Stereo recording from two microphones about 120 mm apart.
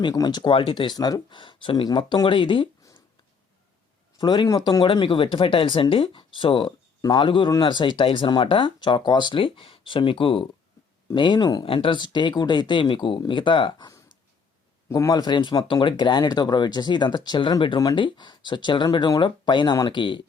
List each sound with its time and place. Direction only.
0.0 s speech: 35° left (ahead or behind)
4.2 s speech: 35° left (ahead or behind)